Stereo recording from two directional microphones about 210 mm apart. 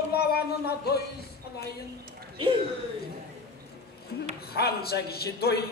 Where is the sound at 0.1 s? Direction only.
50° left (ahead or behind).